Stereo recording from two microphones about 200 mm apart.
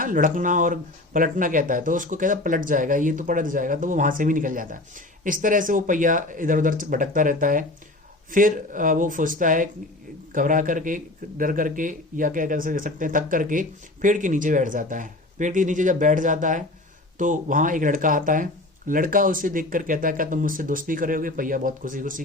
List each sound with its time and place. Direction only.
0.0 s speech: 45° right (ahead or behind)